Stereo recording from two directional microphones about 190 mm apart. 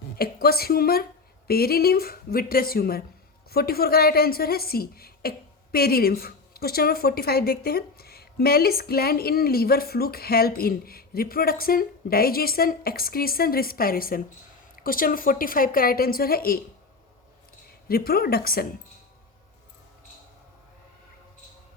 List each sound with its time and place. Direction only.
0.2 s a woman's voice: 55° left (ahead or behind)
17.8 s a woman's voice: 55° left (ahead or behind)